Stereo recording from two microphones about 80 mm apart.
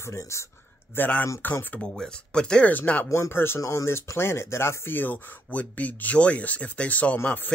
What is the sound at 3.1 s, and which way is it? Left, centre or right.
Speech, left.